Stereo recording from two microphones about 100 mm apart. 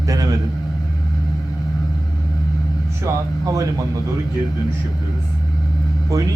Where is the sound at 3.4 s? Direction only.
35° right (ahead or behind).